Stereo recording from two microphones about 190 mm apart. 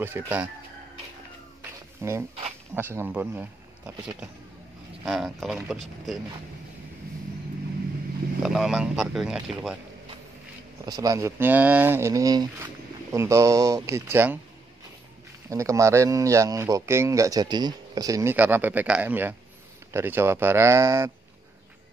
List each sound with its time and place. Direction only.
0.0 s speech: 10° right (ahead or behind)
1.6 s cat: 15° right (ahead or behind)
2.7 s speech: 10° right (ahead or behind)
8.4 s speech: centre (ahead or behind)
10.9 s speech: 20° right (ahead or behind)
15.5 s speech: 15° right (ahead or behind)